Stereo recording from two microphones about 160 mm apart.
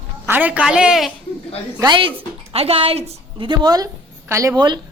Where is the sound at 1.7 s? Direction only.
25° right (ahead or behind).